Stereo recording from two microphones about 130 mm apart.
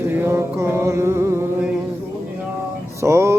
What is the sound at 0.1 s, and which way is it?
Mantra, 20° right (ahead or behind).